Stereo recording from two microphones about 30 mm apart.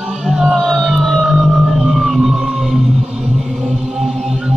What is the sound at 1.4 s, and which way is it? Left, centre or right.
Music, centre.